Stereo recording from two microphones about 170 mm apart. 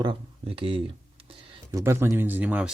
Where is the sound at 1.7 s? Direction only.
15° right (ahead or behind).